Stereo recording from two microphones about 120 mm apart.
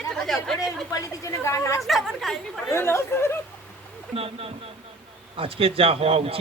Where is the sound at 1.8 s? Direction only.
Centre (ahead or behind).